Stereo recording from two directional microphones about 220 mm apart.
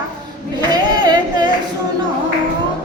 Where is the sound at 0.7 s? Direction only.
20° right (ahead or behind).